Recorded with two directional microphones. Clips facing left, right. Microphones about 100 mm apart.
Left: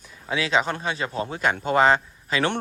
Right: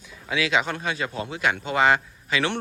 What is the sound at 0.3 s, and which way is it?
Speech, 35° left (ahead or behind).